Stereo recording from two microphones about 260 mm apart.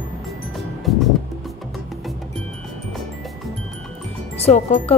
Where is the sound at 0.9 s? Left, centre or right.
Centre.